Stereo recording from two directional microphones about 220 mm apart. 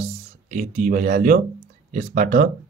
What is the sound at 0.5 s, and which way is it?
Speech, 35° right (ahead or behind).